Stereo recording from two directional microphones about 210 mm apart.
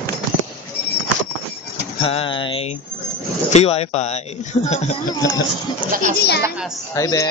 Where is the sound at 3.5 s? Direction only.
30° left (ahead or behind).